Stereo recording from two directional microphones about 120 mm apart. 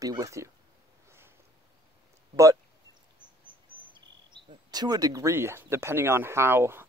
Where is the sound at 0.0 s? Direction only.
30° right (ahead or behind).